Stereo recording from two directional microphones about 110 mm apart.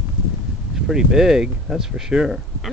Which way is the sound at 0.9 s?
5° right (ahead or behind).